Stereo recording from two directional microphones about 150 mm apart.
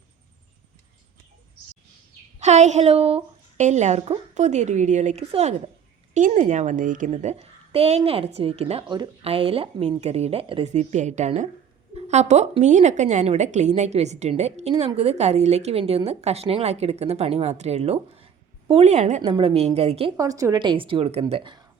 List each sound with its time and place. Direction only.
2.4 s a woman's voice: 50° right (ahead or behind)
6.1 s a woman's voice: 55° right (ahead or behind)
20.1 s a woman's voice: 25° right (ahead or behind)